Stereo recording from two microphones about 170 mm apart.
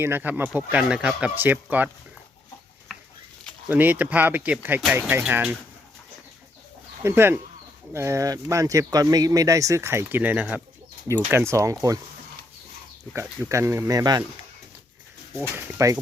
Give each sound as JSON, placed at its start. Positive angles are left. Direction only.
{"t": 0.0, "sound": "speech", "side_deg": -10}
{"t": 3.7, "sound": "speech", "side_deg": -10}
{"t": 7.0, "sound": "speech", "side_deg": -15}
{"t": 13.1, "sound": "speech", "side_deg": -15}
{"t": 15.4, "sound": "speech", "side_deg": -10}